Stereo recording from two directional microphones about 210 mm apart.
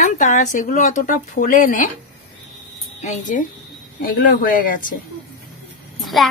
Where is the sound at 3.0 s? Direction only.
40° left (ahead or behind).